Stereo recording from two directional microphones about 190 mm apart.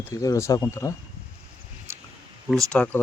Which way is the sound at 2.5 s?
5° left (ahead or behind).